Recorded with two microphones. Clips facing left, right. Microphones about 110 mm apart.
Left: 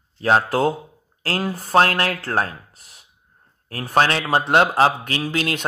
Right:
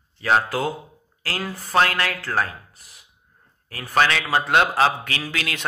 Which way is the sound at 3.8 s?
25° left (ahead or behind).